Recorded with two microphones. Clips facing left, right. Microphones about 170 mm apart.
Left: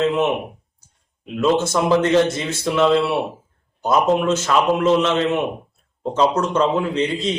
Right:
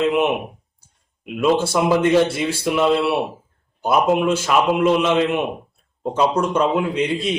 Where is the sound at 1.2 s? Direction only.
10° right (ahead or behind).